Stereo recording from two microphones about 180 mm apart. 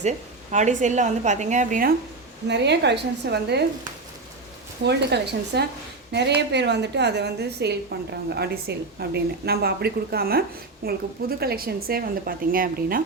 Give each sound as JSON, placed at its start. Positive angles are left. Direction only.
{"t": 0.5, "sound": "a woman's voice", "side_deg": -45}
{"t": 2.5, "sound": "a woman's voice", "side_deg": -70}
{"t": 4.8, "sound": "a woman's voice", "side_deg": -65}